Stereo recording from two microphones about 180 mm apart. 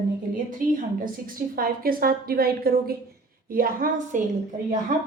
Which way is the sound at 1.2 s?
55° right (ahead or behind).